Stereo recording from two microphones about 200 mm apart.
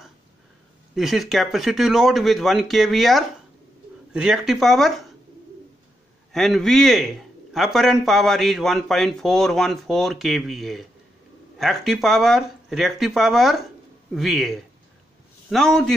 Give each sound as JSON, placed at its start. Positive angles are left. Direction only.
{"t": 0.9, "sound": "speech", "side_deg": 0}
{"t": 6.3, "sound": "speech", "side_deg": 0}